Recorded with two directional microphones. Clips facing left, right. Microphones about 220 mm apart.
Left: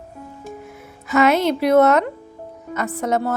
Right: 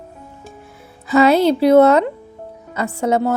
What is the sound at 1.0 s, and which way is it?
Speech, 30° right (ahead or behind).